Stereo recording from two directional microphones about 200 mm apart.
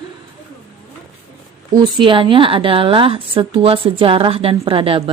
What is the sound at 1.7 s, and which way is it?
A woman's voice, 25° right (ahead or behind).